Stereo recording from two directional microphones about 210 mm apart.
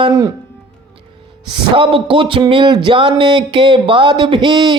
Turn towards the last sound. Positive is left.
turn(degrees=-20)  # may be behind; listen again after turning